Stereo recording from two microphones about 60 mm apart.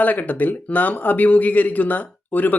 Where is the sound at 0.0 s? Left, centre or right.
Left.